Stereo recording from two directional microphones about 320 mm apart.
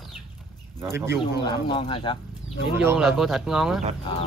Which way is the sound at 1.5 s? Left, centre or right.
Centre.